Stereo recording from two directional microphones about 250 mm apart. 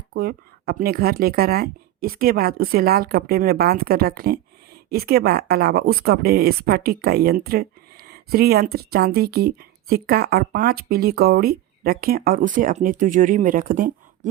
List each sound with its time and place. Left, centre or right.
0.1 s speech: right